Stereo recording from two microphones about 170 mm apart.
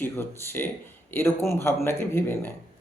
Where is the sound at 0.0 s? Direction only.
15° left (ahead or behind).